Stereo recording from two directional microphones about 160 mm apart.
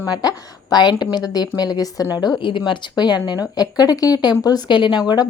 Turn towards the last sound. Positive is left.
turn(degrees=30)  # may be behind; listen again after turning